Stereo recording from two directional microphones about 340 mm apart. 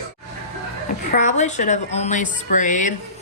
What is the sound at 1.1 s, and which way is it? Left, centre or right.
A woman's voice, left.